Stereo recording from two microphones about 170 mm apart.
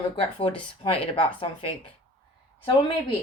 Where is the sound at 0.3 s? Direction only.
35° left (ahead or behind).